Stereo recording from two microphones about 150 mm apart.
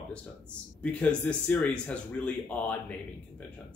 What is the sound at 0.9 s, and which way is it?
Speech, 10° left (ahead or behind).